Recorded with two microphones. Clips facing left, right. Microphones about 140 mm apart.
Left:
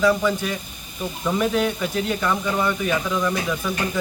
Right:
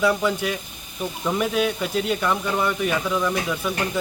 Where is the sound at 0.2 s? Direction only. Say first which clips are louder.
Even; 10° right (ahead or behind).